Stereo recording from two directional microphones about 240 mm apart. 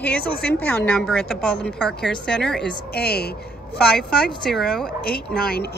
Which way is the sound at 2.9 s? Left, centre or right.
Left.